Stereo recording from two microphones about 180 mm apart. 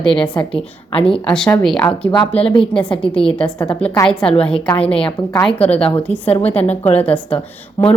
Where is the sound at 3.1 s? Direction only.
5° left (ahead or behind).